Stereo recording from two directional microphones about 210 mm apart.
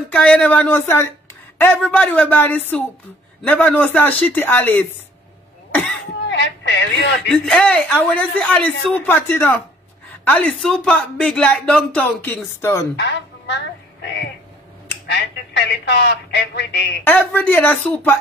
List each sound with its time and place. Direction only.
0.1 s a man's voice: 5° left (ahead or behind)
5.7 s cough: 5° left (ahead or behind)
6.2 s speech: 55° left (ahead or behind)
7.2 s speech: 5° left (ahead or behind)
12.9 s speech: 55° left (ahead or behind)
15.0 s speech: 55° left (ahead or behind)
17.0 s a man's voice: 10° left (ahead or behind)